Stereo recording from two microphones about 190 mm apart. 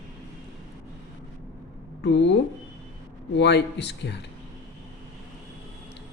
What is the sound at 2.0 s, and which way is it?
Speech, 70° left (ahead or behind).